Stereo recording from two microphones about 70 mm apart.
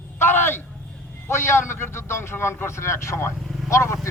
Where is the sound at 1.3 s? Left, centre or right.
Left.